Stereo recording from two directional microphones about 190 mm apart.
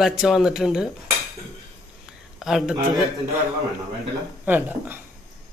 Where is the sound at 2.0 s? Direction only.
5° right (ahead or behind).